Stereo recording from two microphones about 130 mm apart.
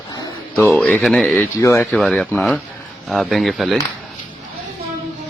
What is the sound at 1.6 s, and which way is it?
Speech, 20° left (ahead or behind).